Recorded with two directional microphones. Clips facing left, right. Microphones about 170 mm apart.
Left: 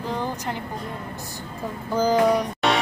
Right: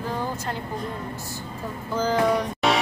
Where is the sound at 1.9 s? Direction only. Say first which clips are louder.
Left 3 dB; 15° left (ahead or behind).